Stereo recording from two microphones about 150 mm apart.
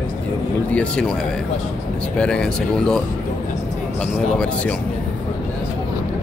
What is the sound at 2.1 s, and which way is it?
Speech, 5° left (ahead or behind).